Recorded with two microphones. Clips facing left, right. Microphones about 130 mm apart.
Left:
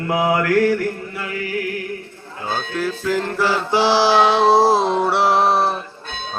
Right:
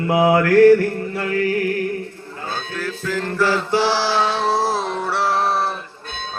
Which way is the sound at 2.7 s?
20° left (ahead or behind).